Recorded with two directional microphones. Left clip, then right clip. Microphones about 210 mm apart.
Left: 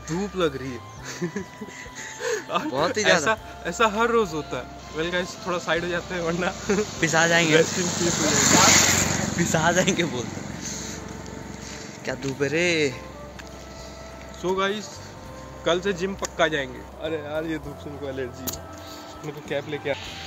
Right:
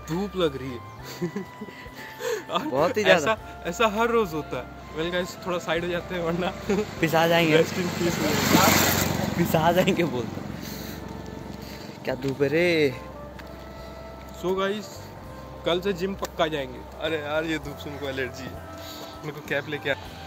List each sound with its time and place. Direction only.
0.1 s speech: 10° left (ahead or behind)
2.2 s a sound: 10° left (ahead or behind)
3.0 s speech: 15° right (ahead or behind)
3.3 s speech: 10° left (ahead or behind)
6.9 s speech: 10° right (ahead or behind)
7.6 s speech: 25° right (ahead or behind)
9.2 s speech: 5° right (ahead or behind)
10.1 s vehicle: 20° right (ahead or behind)
12.3 s speech: 15° right (ahead or behind)
14.4 s speech: 5° left (ahead or behind)
19.2 s speech: 10° left (ahead or behind)